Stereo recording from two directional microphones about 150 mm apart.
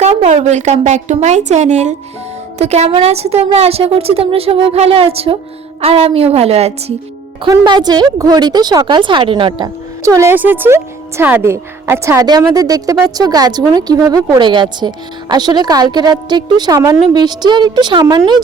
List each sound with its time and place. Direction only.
0.0 s a woman's voice: 45° right (ahead or behind)
7.4 s a woman's voice: 30° right (ahead or behind)
10.0 s a woman's voice: 20° right (ahead or behind)